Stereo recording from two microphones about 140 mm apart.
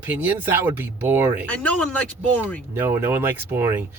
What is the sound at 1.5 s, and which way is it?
Speech, 10° left (ahead or behind).